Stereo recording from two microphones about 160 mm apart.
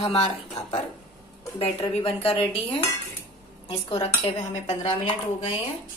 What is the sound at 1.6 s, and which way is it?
Dishes, 35° left (ahead or behind).